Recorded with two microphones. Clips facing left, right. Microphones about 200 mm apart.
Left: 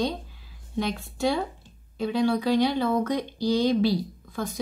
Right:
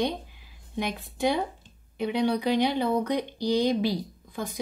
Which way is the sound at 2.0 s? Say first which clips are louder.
Left 1 dB; 20° right (ahead or behind).